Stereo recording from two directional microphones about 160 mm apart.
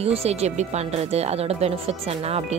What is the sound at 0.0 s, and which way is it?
Speech, 40° right (ahead or behind).